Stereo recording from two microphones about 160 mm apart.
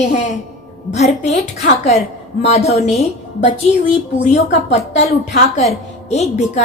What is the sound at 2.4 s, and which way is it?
Speech, 40° left (ahead or behind).